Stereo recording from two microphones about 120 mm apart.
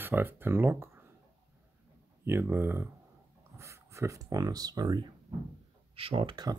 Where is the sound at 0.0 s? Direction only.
15° right (ahead or behind).